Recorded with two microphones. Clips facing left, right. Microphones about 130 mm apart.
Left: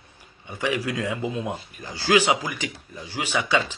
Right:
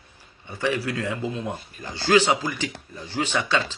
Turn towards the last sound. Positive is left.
turn(degrees=10)  # may be behind; listen again after turning